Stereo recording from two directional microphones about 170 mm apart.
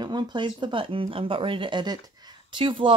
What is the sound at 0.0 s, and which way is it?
Speech, 25° right (ahead or behind).